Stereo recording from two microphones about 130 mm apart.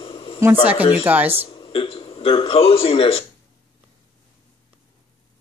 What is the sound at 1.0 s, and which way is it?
Speech, 10° right (ahead or behind).